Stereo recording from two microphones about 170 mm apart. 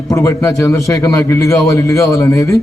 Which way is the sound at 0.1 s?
20° left (ahead or behind).